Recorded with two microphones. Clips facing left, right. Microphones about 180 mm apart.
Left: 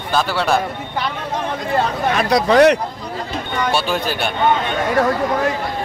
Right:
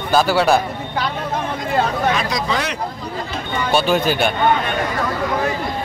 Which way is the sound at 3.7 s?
Centre (ahead or behind).